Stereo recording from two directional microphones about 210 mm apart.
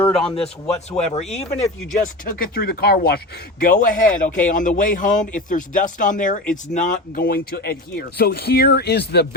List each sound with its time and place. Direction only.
0.7 s a man's voice: 30° left (ahead or behind)
2.2 s a man's voice: 45° left (ahead or behind)